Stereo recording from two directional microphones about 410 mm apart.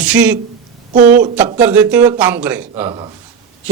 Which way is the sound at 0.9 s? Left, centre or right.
Centre.